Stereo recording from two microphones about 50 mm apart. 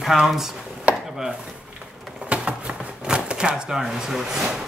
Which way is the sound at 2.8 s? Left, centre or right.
Right.